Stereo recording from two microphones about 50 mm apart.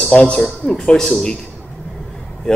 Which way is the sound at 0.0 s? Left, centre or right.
Left.